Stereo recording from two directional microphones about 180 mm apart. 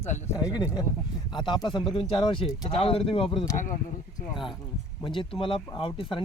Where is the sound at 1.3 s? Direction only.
25° left (ahead or behind).